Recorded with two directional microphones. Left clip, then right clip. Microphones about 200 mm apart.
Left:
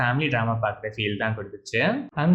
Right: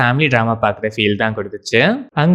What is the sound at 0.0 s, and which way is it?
Speech, 45° right (ahead or behind).